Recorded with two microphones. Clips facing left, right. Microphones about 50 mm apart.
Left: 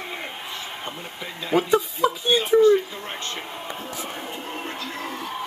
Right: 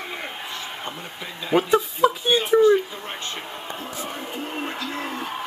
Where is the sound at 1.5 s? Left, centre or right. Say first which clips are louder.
Right 1 dB; centre.